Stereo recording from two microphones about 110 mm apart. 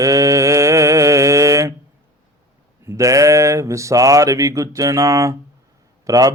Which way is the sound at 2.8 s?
25° right (ahead or behind).